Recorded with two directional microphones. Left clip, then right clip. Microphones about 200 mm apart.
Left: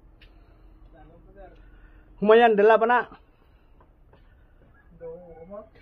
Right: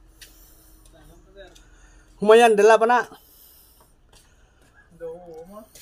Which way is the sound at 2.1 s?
25° right (ahead or behind).